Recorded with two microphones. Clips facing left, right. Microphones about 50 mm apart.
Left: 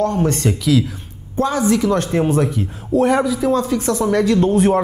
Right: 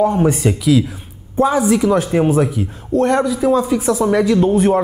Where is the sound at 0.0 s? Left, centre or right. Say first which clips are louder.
Right 3 dB; centre.